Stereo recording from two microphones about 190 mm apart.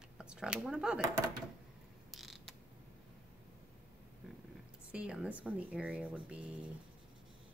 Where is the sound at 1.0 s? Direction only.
20° right (ahead or behind).